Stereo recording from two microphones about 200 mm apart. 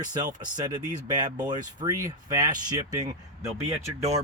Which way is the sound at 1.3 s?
20° right (ahead or behind).